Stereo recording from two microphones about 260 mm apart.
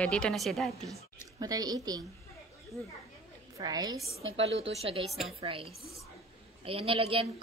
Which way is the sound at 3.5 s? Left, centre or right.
Centre.